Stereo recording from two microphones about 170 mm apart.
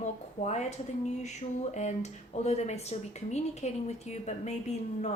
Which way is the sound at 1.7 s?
40° left (ahead or behind).